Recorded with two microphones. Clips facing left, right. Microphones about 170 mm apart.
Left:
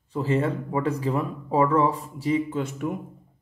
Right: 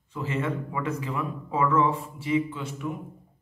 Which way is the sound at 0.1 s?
35° left (ahead or behind).